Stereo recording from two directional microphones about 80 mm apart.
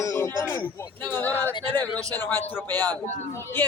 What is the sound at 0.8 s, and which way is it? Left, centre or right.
A man's voice, left.